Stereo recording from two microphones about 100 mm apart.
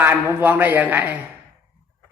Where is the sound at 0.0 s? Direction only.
20° right (ahead or behind).